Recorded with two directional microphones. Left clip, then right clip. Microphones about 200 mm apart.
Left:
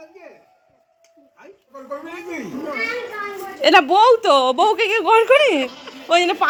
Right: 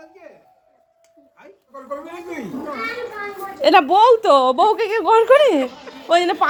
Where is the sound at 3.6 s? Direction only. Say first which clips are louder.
Even; 10° right (ahead or behind).